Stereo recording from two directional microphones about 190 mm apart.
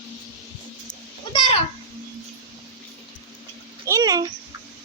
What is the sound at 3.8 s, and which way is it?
Speech, 20° right (ahead or behind).